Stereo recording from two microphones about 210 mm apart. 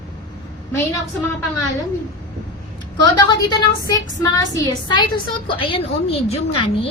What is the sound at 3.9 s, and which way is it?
A woman's voice, 15° left (ahead or behind).